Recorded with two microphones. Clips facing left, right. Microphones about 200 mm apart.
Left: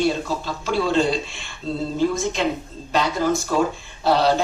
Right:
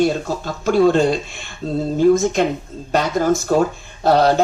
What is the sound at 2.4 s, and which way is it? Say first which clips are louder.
Speech: right 5 dB; 45° right (ahead or behind).